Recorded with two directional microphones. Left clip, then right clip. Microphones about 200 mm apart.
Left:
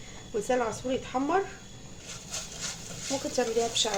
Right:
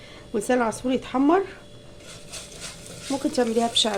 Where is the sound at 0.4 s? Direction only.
45° right (ahead or behind).